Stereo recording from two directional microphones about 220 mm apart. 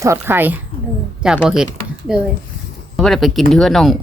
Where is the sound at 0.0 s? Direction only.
10° right (ahead or behind).